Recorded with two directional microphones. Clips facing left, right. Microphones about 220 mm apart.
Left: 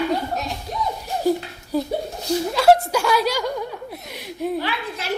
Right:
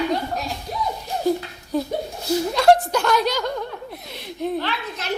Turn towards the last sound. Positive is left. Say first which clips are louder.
# left 1 dB
turn(degrees=10)  # may be behind; listen again after turning